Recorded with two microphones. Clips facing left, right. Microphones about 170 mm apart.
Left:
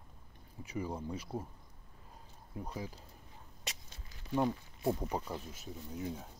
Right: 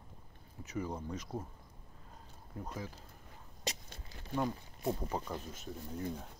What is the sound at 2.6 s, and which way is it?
Speech, 15° left (ahead or behind).